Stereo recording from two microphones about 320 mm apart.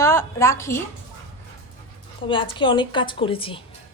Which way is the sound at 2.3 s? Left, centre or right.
Centre.